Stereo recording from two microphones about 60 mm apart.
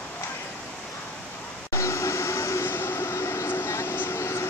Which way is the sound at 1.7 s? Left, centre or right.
Left.